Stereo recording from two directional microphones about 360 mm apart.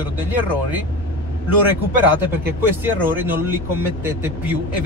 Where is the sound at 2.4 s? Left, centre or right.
Centre.